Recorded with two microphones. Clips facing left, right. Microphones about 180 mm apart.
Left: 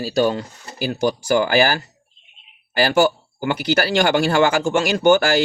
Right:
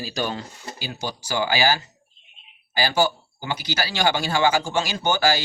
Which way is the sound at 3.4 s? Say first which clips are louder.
Left 9 dB; 60° left (ahead or behind).